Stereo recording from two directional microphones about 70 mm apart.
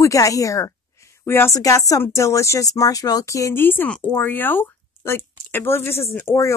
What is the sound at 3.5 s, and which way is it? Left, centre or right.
Speech, left.